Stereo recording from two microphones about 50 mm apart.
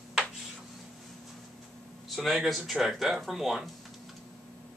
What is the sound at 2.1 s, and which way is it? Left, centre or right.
Speech, centre.